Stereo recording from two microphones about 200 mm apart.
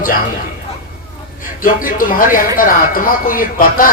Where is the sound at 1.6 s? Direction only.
45° left (ahead or behind).